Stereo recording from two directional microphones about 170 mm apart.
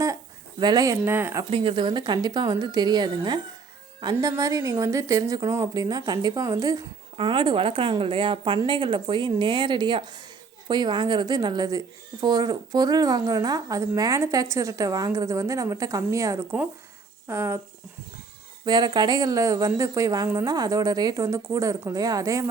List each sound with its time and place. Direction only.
0.6 s speech: 20° right (ahead or behind)
1.5 s speech: 30° right (ahead or behind); by 17.6 s 15° right (ahead or behind)
18.6 s speech: 25° right (ahead or behind)